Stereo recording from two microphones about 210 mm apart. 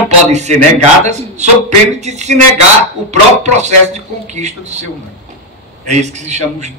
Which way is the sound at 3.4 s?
35° right (ahead or behind).